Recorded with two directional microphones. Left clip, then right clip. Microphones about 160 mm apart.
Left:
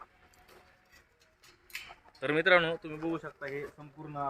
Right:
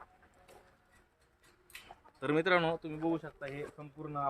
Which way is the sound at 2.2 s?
75° right (ahead or behind).